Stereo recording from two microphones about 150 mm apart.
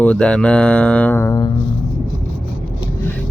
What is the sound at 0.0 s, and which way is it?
Speech, 10° left (ahead or behind).